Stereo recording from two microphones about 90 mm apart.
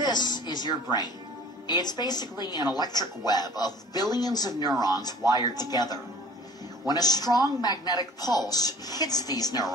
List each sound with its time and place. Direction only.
0.0 s music: 50° left (ahead or behind)
1.7 s speech: 50° left (ahead or behind)